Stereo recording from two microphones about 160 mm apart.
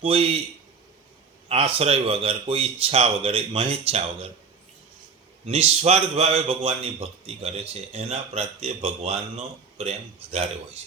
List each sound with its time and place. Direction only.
0.0 s speech: 35° right (ahead or behind)
1.5 s speech: 40° right (ahead or behind)
5.5 s speech: 40° right (ahead or behind)